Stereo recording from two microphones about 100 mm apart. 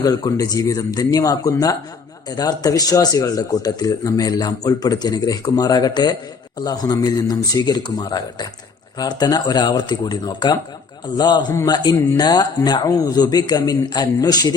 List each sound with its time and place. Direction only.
0.0 s a man's voice: 40° left (ahead or behind)